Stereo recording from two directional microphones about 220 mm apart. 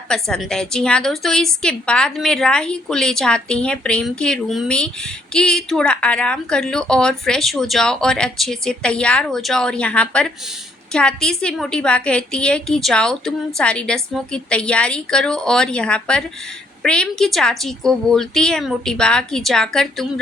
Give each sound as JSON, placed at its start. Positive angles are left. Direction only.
{"t": 0.1, "sound": "a woman's voice", "side_deg": 5}